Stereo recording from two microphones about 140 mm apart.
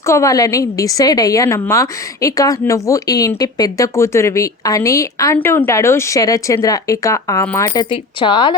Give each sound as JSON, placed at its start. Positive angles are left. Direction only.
{"t": 0.0, "sound": "a woman's voice", "side_deg": 20}